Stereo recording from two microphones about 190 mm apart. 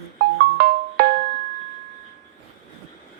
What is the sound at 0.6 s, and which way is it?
Music, 50° right (ahead or behind).